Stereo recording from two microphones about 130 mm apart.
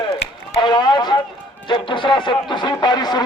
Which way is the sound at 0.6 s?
35° left (ahead or behind).